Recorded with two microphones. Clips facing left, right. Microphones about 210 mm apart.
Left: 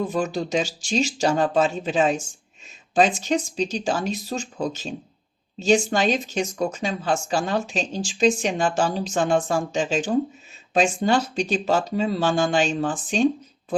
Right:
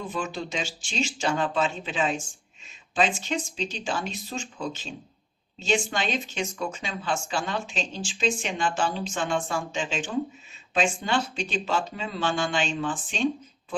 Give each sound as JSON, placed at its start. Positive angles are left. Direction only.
{"t": 0.1, "sound": "speech", "side_deg": 40}